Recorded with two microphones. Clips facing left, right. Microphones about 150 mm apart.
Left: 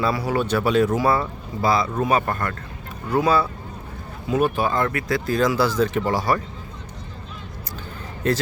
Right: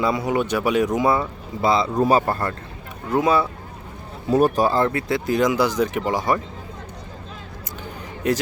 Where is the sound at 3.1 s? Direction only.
20° right (ahead or behind).